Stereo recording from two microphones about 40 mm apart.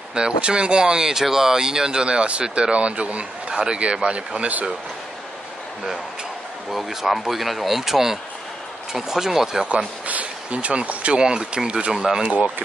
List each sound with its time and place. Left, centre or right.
0.1 s speech: right
6.7 s speech: centre
10.0 s a sound: right
11.1 s speech: centre